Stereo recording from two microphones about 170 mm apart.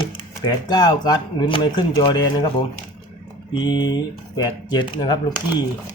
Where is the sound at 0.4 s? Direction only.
25° left (ahead or behind).